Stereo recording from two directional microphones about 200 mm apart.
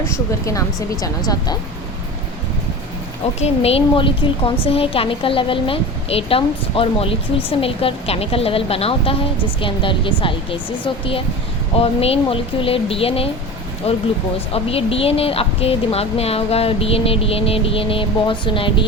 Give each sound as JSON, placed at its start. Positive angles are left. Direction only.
{"t": 0.0, "sound": "a woman's voice", "side_deg": 15}
{"t": 3.4, "sound": "a woman's voice", "side_deg": 30}